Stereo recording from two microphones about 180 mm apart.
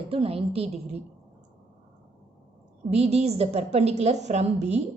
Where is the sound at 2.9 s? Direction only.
35° right (ahead or behind).